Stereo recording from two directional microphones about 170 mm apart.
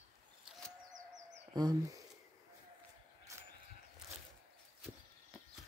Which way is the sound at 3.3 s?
15° right (ahead or behind).